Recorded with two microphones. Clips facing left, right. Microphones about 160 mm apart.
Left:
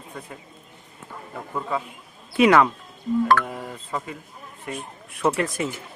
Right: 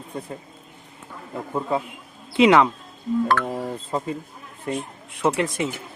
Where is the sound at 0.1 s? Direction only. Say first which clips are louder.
Right 6 dB; 30° right (ahead or behind).